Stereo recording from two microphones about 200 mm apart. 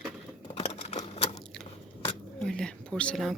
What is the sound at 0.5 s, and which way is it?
Typewriter, 30° left (ahead or behind).